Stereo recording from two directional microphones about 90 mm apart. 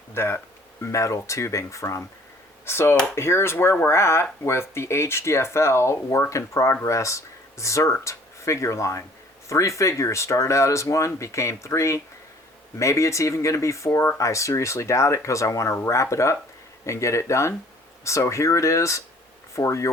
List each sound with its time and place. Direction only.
0.1 s speech: 30° left (ahead or behind)